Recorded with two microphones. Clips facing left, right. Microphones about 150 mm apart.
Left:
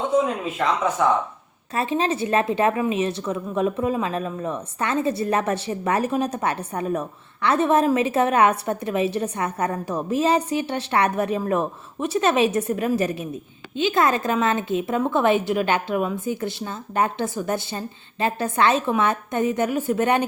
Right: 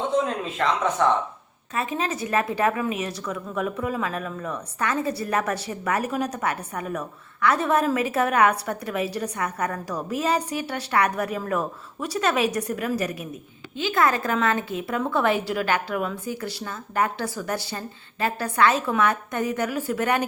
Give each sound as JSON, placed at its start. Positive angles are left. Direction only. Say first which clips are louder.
{"t": 0.3, "sound": "speech", "louder": "left 2 dB", "side_deg": 5}
{"t": 1.7, "sound": "a woman's voice", "louder": "left 4 dB", "side_deg": 30}